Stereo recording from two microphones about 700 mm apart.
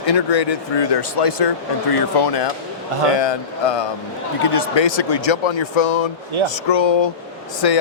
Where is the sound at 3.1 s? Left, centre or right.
Left.